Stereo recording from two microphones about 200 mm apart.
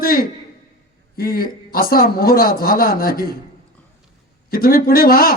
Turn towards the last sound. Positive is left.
turn(degrees=50)  # may be behind; listen again after turning